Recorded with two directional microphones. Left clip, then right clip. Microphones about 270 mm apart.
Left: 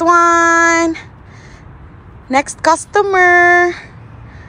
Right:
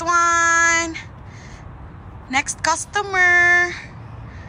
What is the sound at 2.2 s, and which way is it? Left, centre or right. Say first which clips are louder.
Speech: left 7 dB; centre.